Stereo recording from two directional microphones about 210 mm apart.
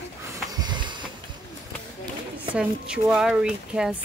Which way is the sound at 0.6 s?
20° right (ahead or behind).